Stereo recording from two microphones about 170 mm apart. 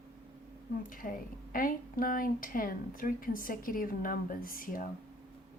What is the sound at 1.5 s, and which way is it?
A woman's voice, 55° left (ahead or behind).